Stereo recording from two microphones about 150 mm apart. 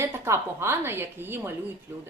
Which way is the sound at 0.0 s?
15° right (ahead or behind).